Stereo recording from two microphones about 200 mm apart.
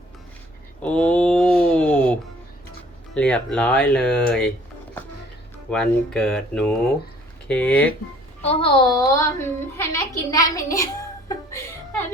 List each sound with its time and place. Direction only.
0.8 s a sound: 5° left (ahead or behind)
3.2 s speech: 5° left (ahead or behind)
5.7 s speech: 5° left (ahead or behind)
8.4 s a woman's voice: 30° left (ahead or behind)